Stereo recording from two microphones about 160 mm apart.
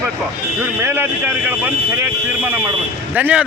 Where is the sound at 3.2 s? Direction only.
10° right (ahead or behind).